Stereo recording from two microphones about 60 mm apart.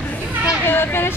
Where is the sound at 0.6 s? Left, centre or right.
Left.